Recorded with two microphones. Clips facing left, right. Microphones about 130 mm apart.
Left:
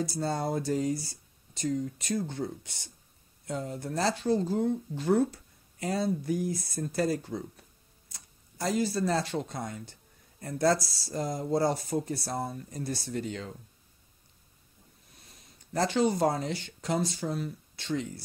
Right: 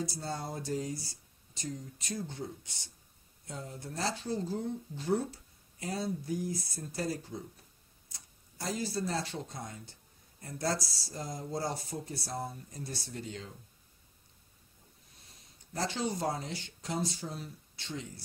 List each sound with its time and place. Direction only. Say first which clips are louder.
0.2 s speech: left 8 dB; 80° left; by 2.7 s 65° left (ahead or behind)
3.4 s speech: left 8 dB; 75° left (ahead or behind)
8.5 s speech: left 7 dB; 70° left (ahead or behind)
15.7 s speech: left 8 dB; 70° left (ahead or behind)